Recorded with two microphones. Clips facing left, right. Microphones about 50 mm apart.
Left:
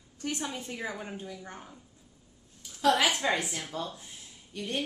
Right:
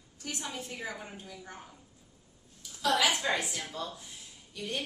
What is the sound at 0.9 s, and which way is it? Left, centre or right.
Speech, centre.